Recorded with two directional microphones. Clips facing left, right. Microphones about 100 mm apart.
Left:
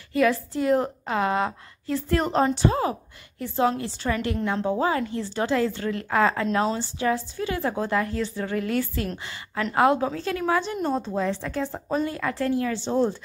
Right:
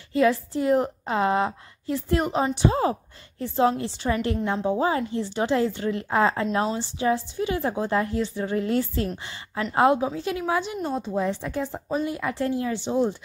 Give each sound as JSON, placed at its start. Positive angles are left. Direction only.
{"t": 0.1, "sound": "a woman's voice", "side_deg": -25}
{"t": 2.7, "sound": "a woman's voice", "side_deg": -30}
{"t": 11.1, "sound": "speech", "side_deg": -15}